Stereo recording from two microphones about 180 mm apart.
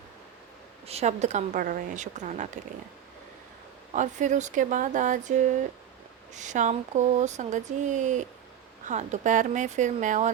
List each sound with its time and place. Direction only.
0.9 s a woman's voice: 35° right (ahead or behind)
3.9 s speech: 45° right (ahead or behind)
6.3 s speech: 45° right (ahead or behind)